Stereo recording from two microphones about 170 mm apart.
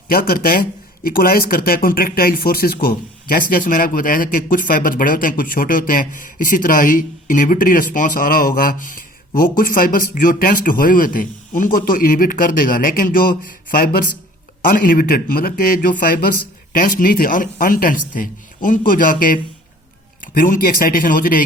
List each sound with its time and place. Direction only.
0.1 s speech: 60° left (ahead or behind)